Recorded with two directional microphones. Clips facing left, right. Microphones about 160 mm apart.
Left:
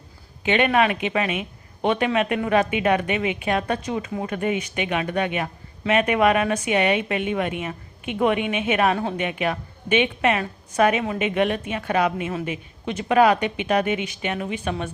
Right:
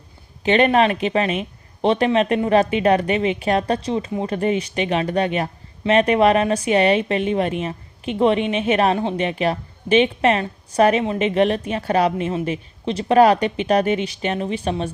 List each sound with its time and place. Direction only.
0.4 s speech: 35° right (ahead or behind)